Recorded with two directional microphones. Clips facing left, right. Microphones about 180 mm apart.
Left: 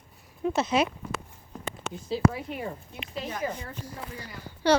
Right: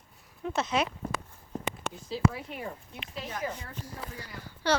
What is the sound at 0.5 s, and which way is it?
Speech, 5° left (ahead or behind).